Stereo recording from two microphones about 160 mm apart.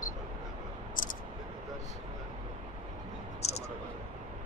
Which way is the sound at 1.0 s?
55° left (ahead or behind).